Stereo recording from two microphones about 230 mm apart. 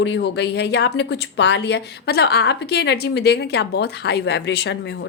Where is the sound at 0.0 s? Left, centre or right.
Left.